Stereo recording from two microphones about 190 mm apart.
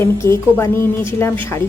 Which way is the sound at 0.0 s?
15° left (ahead or behind).